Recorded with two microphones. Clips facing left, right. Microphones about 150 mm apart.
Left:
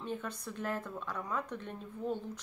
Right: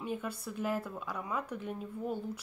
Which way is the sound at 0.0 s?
10° right (ahead or behind).